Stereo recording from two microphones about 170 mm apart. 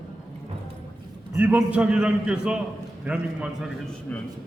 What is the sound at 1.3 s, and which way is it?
A man's voice, 10° right (ahead or behind).